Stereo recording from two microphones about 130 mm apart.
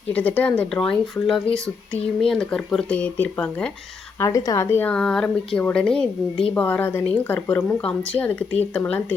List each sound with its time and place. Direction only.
0.1 s speech: 10° left (ahead or behind)
4.2 s speech: 25° left (ahead or behind)